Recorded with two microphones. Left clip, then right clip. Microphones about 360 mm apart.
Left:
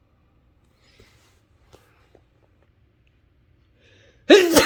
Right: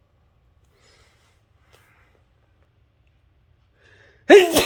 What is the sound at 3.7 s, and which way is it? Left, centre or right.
Gasp, centre.